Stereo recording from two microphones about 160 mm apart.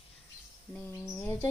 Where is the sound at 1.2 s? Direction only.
15° left (ahead or behind).